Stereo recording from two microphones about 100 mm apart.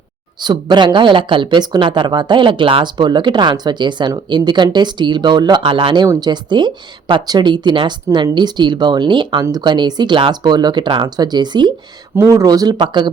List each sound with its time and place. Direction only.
0.3 s speech: 50° right (ahead or behind)
6.1 s speech: 45° right (ahead or behind)
12.1 s speech: 30° right (ahead or behind); by 13.1 s 50° right (ahead or behind)